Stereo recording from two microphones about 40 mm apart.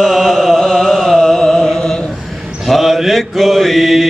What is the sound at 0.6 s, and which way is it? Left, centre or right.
Music, centre.